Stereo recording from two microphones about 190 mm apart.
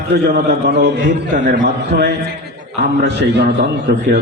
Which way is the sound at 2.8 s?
65° right (ahead or behind).